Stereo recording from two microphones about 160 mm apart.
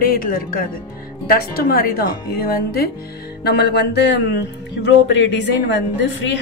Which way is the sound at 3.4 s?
90° left.